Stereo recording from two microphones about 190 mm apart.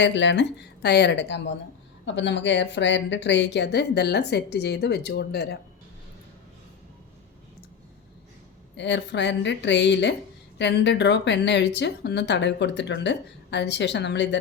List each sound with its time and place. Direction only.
0.0 s a woman's voice: 70° left (ahead or behind)
8.7 s speech: 70° left (ahead or behind)